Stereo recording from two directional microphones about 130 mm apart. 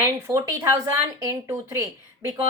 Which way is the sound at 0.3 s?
25° right (ahead or behind).